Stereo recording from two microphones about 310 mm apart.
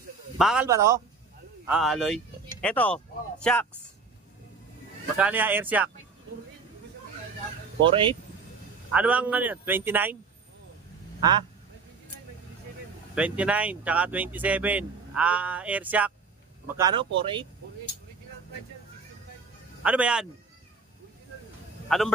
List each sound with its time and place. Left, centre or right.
0.4 s speech: centre
5.1 s speech: centre
7.8 s speech: centre
8.9 s speech: centre
11.1 s speech: centre
13.1 s speech: centre
19.8 s speech: centre
21.8 s speech: centre